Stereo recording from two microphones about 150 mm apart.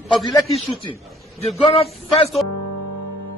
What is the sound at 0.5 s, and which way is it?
A man's voice, 35° left (ahead or behind).